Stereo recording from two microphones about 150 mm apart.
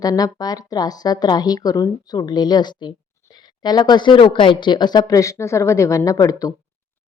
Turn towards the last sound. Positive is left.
turn(degrees=25)  # may be behind; listen again after turning